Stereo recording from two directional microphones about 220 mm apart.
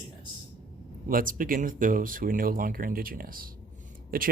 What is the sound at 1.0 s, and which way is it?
Speech, 40° right (ahead or behind).